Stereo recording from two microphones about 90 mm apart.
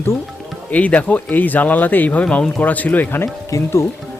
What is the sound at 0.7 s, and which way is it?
Speech, 15° left (ahead or behind).